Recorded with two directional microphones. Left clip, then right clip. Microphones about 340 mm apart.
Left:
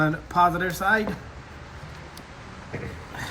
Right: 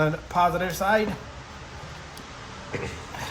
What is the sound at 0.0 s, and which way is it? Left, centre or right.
Speech, centre.